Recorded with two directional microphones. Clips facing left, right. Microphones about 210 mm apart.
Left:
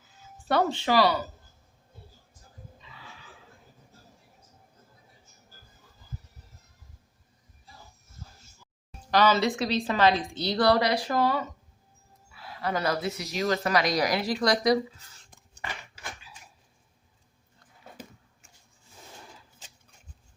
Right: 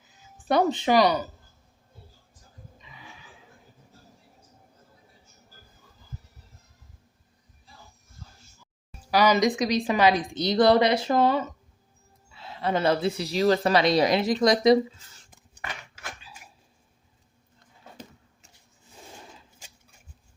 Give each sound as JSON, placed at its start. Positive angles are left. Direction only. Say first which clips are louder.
{"t": 0.4, "sound": "speech", "louder": "right 3 dB", "side_deg": -20}
{"t": 2.8, "sound": "horse", "louder": "right 3 dB", "side_deg": -15}
{"t": 9.0, "sound": "a woman's voice", "louder": "right 2 dB", "side_deg": -10}